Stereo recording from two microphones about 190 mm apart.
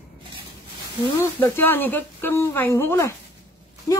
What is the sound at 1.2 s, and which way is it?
Speech, 10° left (ahead or behind).